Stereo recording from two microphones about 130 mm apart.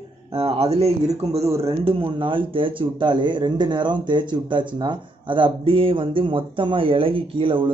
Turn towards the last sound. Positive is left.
turn(degrees=-40)  # may be behind; listen again after turning